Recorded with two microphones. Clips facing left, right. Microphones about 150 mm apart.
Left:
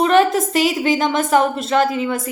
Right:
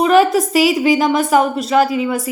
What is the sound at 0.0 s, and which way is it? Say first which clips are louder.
A woman's voice: right 2 dB; 5° right (ahead or behind).